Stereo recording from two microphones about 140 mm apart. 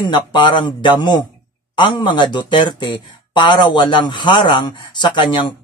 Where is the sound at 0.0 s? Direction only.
30° left (ahead or behind).